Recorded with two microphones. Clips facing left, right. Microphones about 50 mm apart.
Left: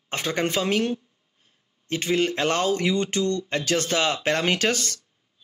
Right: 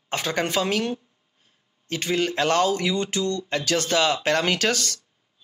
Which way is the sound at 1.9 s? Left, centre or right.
Left.